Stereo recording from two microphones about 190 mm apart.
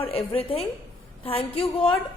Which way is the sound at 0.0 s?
30° left (ahead or behind).